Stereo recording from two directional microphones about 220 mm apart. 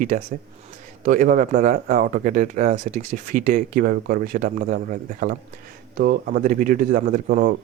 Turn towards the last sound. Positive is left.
turn(degrees=-40)  # may be behind; listen again after turning